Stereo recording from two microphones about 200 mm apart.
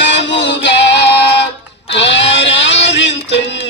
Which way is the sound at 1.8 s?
65° left (ahead or behind).